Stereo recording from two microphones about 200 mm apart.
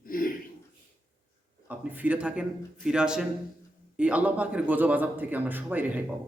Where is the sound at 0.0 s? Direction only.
45° left (ahead or behind).